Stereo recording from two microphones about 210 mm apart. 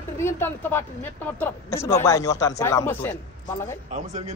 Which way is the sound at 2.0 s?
15° left (ahead or behind).